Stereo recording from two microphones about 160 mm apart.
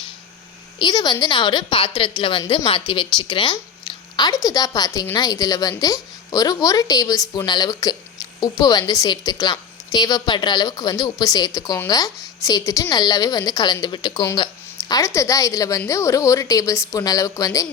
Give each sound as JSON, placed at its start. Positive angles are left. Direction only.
{"t": 0.8, "sound": "a woman's voice", "side_deg": 25}
{"t": 4.4, "sound": "a woman's voice", "side_deg": 25}